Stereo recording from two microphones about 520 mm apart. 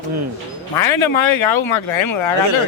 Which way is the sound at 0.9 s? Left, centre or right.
Left.